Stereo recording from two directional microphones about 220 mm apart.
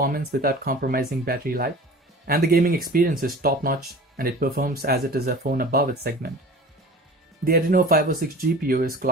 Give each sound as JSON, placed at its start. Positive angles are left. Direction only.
{"t": 0.0, "sound": "speech", "side_deg": -45}
{"t": 7.4, "sound": "speech", "side_deg": -40}